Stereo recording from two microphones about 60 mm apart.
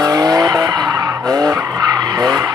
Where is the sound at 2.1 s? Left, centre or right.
Right.